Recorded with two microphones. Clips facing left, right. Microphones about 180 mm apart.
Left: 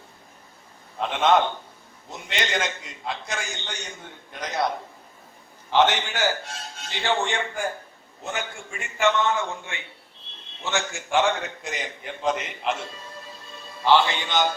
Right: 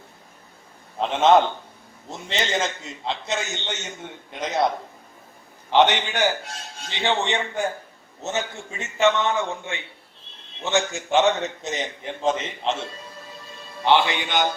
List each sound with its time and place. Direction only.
0.9 s a man's voice: 30° right (ahead or behind)
5.7 s a man's voice: 20° right (ahead or behind)
13.8 s a man's voice: 20° right (ahead or behind)